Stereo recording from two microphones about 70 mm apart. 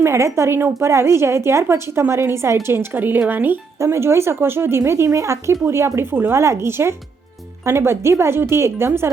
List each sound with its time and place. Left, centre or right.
0.0 s speech: right